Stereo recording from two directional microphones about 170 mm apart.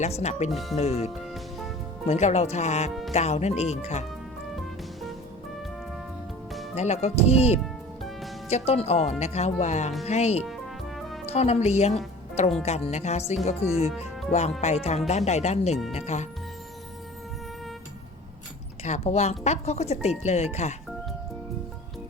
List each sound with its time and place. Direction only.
0.0 s speech: 40° left (ahead or behind)
0.5 s speech: centre (ahead or behind)
0.8 s speech: 40° left (ahead or behind)
6.7 s speech: 40° left (ahead or behind)
7.6 s music: centre (ahead or behind)
8.4 s speech: 40° left (ahead or behind)
10.9 s music: centre (ahead or behind)
11.3 s speech: 40° left (ahead or behind)
18.9 s speech: 40° left (ahead or behind)